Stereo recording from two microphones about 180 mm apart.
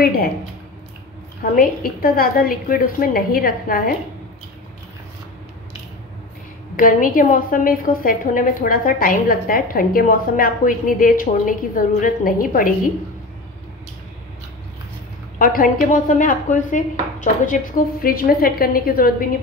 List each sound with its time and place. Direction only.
0.0 s speech: 55° left (ahead or behind)
1.4 s a woman's voice: 50° left (ahead or behind)
6.8 s a woman's voice: 50° left (ahead or behind)
15.3 s a woman's voice: 50° left (ahead or behind)